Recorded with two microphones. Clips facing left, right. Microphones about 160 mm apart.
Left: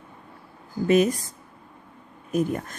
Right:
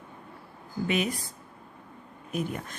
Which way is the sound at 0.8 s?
40° left (ahead or behind).